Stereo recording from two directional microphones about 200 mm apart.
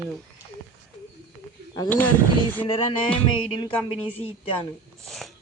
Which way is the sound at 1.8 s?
10° left (ahead or behind).